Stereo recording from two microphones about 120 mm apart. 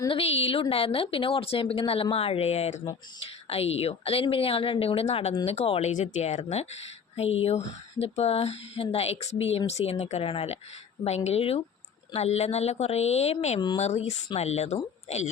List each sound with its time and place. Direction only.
0.1 s a woman's voice: 55° left (ahead or behind)
6.0 s speech: 75° left (ahead or behind)